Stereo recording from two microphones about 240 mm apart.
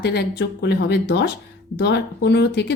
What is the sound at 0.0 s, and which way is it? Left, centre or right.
Speech, left.